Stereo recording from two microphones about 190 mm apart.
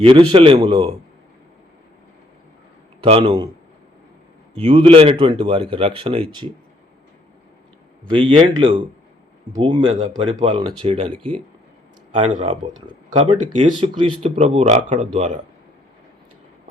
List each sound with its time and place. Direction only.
0.0 s speech: 30° right (ahead or behind)
3.0 s speech: 25° right (ahead or behind)
4.6 s speech: 30° right (ahead or behind)
8.1 s speech: 25° right (ahead or behind)